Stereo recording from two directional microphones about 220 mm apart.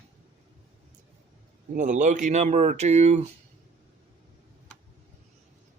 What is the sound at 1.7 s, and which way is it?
Speech, 35° right (ahead or behind).